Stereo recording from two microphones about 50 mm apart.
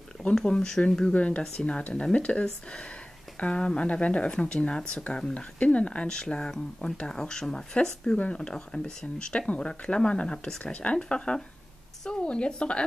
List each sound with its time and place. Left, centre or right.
0.5 s speech: centre
1.8 s speech: left
5.0 s speech: left